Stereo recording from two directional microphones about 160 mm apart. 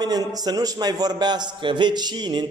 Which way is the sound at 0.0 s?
25° right (ahead or behind).